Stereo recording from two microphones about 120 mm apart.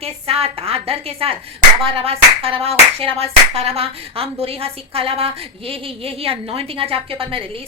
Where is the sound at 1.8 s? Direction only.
50° right (ahead or behind).